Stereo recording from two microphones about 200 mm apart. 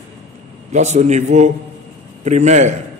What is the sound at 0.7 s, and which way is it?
A man's voice, 35° right (ahead or behind).